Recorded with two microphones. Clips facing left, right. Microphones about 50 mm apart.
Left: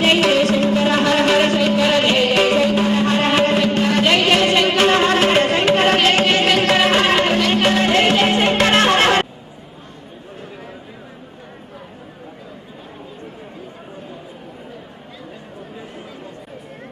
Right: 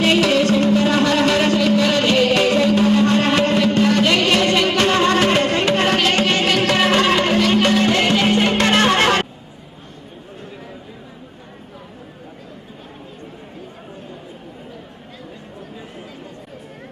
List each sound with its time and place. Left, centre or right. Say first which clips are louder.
0.0 s music: left 1 dB; left
1.0 s music: left 1 dB; left
8.5 s music: left 1 dB; centre